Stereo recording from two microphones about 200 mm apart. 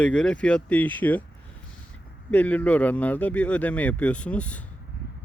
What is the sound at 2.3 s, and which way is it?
Speech, 10° left (ahead or behind).